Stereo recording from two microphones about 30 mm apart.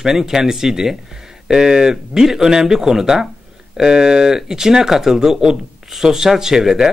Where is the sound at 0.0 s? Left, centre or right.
Centre.